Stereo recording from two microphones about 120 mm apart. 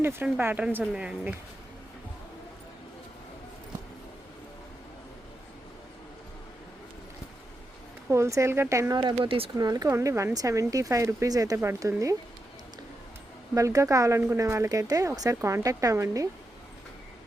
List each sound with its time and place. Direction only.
0.0 s speech: 20° right (ahead or behind)
8.1 s speech: 25° right (ahead or behind); by 9.5 s 45° right (ahead or behind)
9.6 s speech: 35° right (ahead or behind)
13.5 s speech: 25° right (ahead or behind)